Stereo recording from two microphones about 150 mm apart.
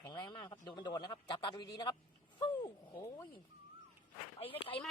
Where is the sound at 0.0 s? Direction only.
30° left (ahead or behind).